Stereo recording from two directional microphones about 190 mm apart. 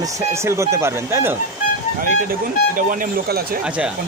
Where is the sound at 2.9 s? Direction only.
50° right (ahead or behind).